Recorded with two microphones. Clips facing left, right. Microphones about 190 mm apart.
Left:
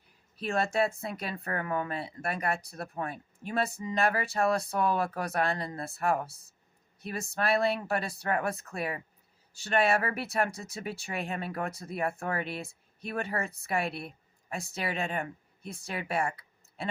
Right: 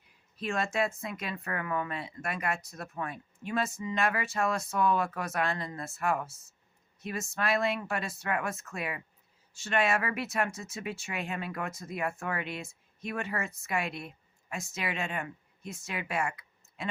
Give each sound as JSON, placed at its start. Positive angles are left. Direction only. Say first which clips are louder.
{"t": 0.3, "sound": "speech", "louder": "left 2 dB", "side_deg": 35}